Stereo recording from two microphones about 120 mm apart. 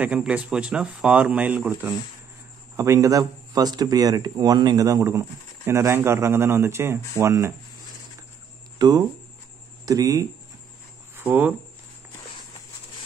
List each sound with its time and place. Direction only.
0.0 s speech: 10° right (ahead or behind)
2.7 s speech: 25° right (ahead or behind)
8.7 s speech: 35° right (ahead or behind)
11.1 s speech: 15° right (ahead or behind)